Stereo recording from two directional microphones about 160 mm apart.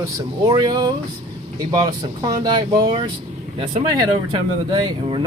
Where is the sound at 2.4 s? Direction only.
30° right (ahead or behind).